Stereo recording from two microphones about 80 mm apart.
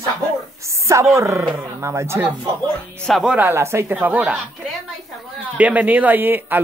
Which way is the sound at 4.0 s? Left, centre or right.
Right.